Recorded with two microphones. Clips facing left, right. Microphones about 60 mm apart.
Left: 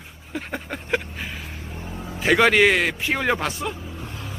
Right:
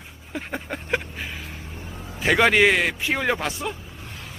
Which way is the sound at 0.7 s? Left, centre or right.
Centre.